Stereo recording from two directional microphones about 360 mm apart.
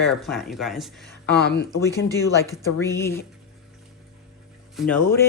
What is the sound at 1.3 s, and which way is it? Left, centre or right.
Speech, left.